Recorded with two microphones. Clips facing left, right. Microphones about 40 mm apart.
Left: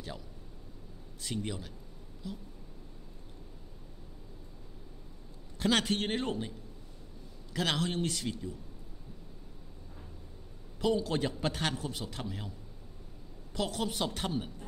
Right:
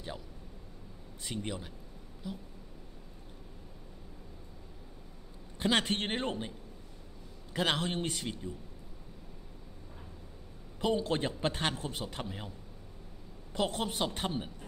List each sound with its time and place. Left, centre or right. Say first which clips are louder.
1.2 s a man's voice: left 1 dB; centre
5.6 s a man's voice: even; centre
5.9 s a man's voice: left 1 dB; right
7.5 s a man's voice: even; right
10.8 s a man's voice: left 1 dB; right
14.0 s speech: even; centre